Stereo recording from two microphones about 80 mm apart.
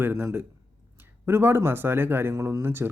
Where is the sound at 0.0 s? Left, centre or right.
Right.